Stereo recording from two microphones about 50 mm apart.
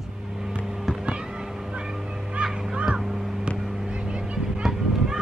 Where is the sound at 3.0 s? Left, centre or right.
Centre.